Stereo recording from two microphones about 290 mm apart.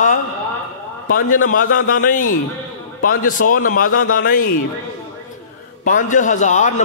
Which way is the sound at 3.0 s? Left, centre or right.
Left.